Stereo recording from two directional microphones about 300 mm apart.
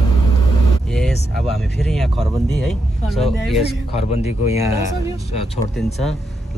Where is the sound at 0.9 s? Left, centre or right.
Centre.